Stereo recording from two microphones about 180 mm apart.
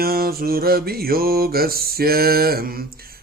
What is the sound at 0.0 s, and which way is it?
Mantra, 55° right (ahead or behind).